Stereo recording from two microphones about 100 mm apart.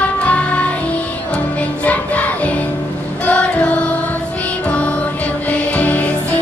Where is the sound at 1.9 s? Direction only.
15° left (ahead or behind).